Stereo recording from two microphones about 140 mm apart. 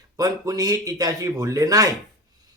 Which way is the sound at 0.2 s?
25° right (ahead or behind).